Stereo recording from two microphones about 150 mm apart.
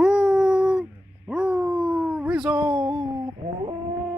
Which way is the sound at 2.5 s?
30° right (ahead or behind).